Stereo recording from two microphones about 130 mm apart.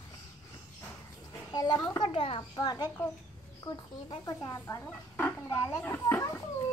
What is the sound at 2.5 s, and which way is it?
Speech, 30° left (ahead or behind).